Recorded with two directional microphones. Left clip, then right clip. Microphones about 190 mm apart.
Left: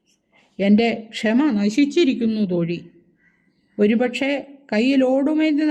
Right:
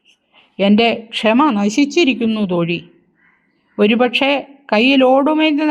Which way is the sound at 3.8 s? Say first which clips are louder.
Right 7 dB; 10° right (ahead or behind).